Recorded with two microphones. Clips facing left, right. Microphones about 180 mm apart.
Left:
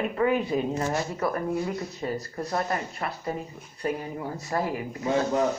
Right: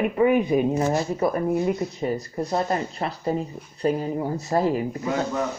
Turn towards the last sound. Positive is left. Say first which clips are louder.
# left 1 dB
turn(degrees=25)  # may be behind; listen again after turning